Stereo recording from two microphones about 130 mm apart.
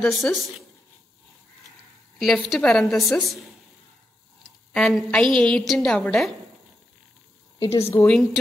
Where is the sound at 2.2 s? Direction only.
Centre (ahead or behind).